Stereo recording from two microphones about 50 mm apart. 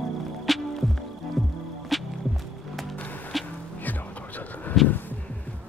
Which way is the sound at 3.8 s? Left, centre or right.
Left.